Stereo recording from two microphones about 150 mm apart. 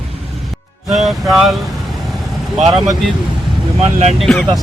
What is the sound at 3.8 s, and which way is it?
Speech, 45° right (ahead or behind).